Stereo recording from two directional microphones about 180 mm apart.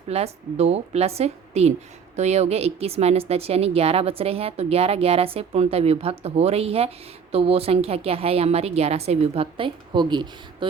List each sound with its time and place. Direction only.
0.1 s speech: 35° right (ahead or behind)